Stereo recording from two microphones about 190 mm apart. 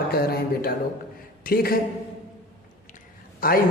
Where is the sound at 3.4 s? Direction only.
50° left (ahead or behind).